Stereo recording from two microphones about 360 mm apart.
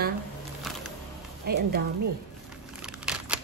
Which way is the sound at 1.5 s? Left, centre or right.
Right.